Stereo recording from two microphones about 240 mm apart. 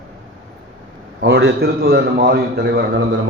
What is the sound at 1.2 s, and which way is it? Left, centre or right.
A man's voice, right.